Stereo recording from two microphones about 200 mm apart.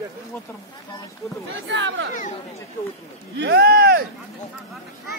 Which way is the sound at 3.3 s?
55° right (ahead or behind).